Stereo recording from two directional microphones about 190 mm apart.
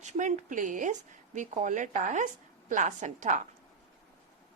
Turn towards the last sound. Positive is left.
turn(degrees=-40)  # may be behind; listen again after turning